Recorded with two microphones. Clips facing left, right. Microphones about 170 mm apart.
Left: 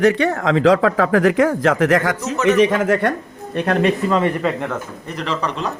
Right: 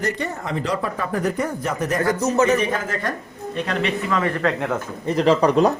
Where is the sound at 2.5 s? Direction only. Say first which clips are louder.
Left 7 dB; 80° left.